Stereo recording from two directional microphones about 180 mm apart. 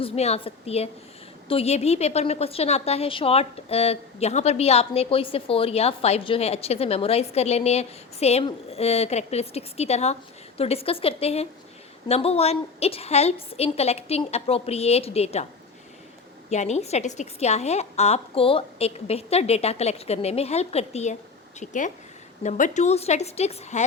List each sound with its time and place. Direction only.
0.0 s a woman's voice: 35° left (ahead or behind)
16.5 s a woman's voice: 40° left (ahead or behind)